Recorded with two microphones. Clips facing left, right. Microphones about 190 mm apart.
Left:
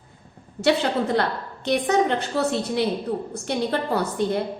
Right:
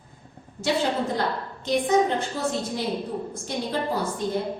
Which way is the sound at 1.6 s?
70° left (ahead or behind).